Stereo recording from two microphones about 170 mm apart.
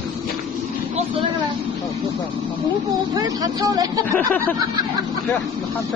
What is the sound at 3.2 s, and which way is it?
Speech, 20° right (ahead or behind).